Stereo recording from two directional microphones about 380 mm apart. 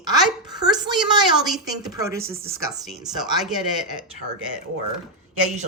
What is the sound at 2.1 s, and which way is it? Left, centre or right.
Speech, right.